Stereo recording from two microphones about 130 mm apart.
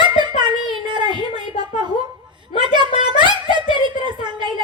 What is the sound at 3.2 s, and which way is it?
Speech, 35° right (ahead or behind).